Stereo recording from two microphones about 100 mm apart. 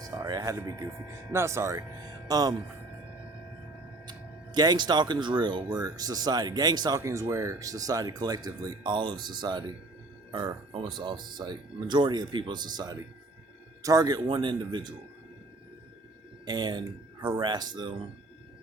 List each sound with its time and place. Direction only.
0.2 s speech: 40° right (ahead or behind)
2.2 s speech: 40° right (ahead or behind)
4.5 s speech: 45° right (ahead or behind)
7.0 s speech: 30° right (ahead or behind); by 9.6 s 45° right (ahead or behind)
10.7 s speech: 55° right (ahead or behind); by 14.2 s 40° right (ahead or behind)
14.2 s speech: 55° right (ahead or behind)
16.5 s speech: 50° right (ahead or behind)